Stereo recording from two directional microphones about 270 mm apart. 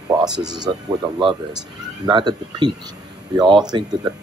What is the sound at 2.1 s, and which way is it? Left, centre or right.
Speech, centre.